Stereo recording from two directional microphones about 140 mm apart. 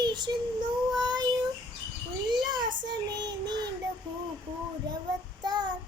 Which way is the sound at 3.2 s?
30° right (ahead or behind).